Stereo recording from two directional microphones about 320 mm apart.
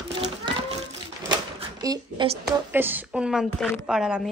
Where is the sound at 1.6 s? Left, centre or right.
Centre.